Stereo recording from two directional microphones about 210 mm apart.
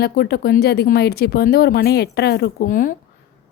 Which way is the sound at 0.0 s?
50° left (ahead or behind).